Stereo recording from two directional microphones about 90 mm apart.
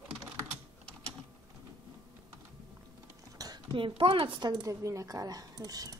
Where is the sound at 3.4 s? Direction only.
50° right (ahead or behind).